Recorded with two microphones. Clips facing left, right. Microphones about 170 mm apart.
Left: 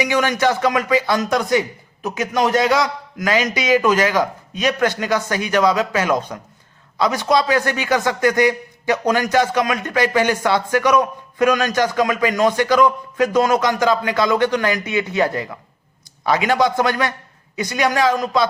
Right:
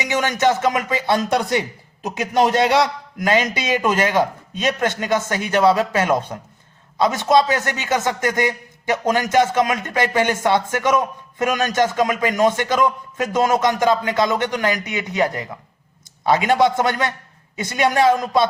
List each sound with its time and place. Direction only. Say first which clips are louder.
0.0 s a man's voice: left 1 dB; 20° right (ahead or behind)